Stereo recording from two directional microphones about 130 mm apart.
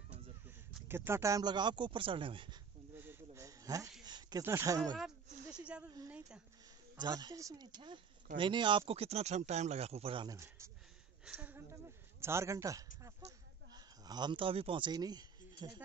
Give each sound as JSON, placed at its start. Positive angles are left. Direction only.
{"t": 0.8, "sound": "speech", "side_deg": -20}
{"t": 3.0, "sound": "a sound", "side_deg": -20}
{"t": 4.4, "sound": "a man's voice", "side_deg": -25}
{"t": 6.0, "sound": "a sound", "side_deg": -10}
{"t": 7.0, "sound": "speech", "side_deg": -30}
{"t": 7.8, "sound": "speech", "side_deg": -40}
{"t": 10.2, "sound": "a man's voice", "side_deg": -25}